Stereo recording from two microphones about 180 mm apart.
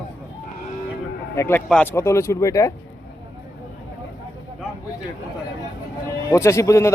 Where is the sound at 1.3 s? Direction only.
10° left (ahead or behind).